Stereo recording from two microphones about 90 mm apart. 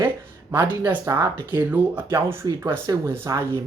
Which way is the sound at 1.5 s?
20° right (ahead or behind).